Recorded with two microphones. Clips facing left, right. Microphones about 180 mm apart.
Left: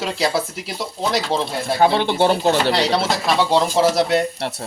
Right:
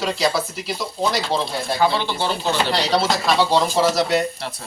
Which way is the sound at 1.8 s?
55° left (ahead or behind).